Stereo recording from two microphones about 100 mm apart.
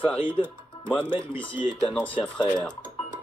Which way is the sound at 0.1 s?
55° left (ahead or behind).